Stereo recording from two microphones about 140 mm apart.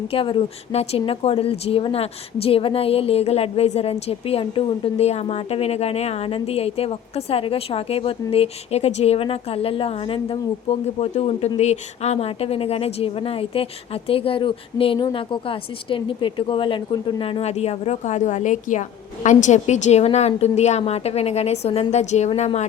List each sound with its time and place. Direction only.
0.1 s a woman's voice: 40° left (ahead or behind)